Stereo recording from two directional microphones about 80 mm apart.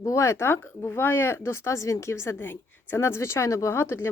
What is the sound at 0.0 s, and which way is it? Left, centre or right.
Speech, left.